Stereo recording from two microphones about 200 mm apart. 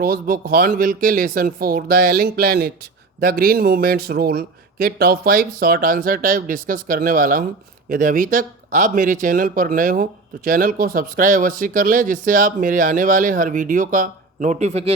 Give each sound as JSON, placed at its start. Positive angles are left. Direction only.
{"t": 0.0, "sound": "speech", "side_deg": -45}